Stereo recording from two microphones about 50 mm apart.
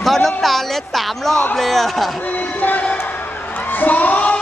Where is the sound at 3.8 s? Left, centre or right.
Left.